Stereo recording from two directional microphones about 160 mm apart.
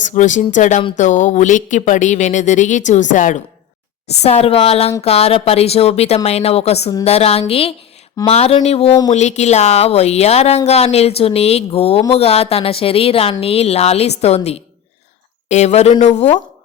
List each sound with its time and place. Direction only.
0.0 s speech: 50° left (ahead or behind)
4.2 s speech: 40° left (ahead or behind)